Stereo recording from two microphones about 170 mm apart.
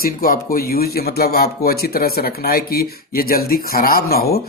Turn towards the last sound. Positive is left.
turn(degrees=65)  # may be behind; listen again after turning